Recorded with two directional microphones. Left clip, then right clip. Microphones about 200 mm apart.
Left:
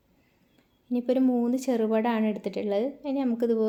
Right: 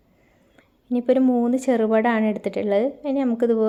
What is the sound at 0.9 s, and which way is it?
A woman's voice, 10° right (ahead or behind).